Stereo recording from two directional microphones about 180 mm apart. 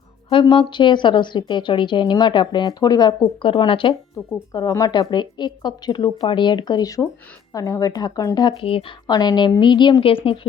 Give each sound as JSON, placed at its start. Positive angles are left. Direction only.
{"t": 0.3, "sound": "a woman's voice", "side_deg": 30}
{"t": 4.5, "sound": "a woman's voice", "side_deg": 20}